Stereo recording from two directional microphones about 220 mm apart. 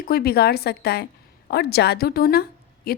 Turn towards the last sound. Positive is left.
turn(degrees=45)  # may be behind; listen again after turning